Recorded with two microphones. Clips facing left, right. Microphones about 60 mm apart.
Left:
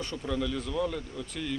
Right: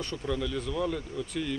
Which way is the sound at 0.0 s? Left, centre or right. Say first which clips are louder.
Even; centre.